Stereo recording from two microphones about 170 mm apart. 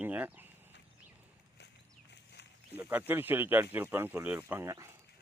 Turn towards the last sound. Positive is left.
turn(degrees=-15)  # may be behind; listen again after turning